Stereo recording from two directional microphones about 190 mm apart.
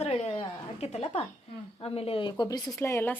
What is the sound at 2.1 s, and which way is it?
Speech, 25° left (ahead or behind).